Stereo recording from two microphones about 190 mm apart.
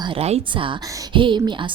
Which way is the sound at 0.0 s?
30° right (ahead or behind).